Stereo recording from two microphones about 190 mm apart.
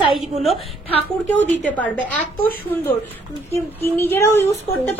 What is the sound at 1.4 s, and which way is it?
Speech, 40° left (ahead or behind).